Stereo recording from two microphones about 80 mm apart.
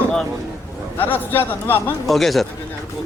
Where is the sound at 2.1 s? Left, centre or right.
Centre.